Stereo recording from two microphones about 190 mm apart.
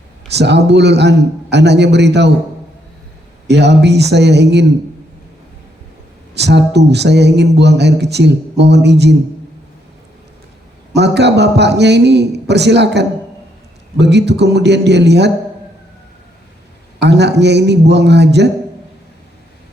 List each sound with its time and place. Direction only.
0.3 s speech: 65° right (ahead or behind)
3.4 s speech: 65° right (ahead or behind)
6.3 s speech: 65° right (ahead or behind)
10.9 s speech: 65° right (ahead or behind)
17.0 s speech: 65° right (ahead or behind)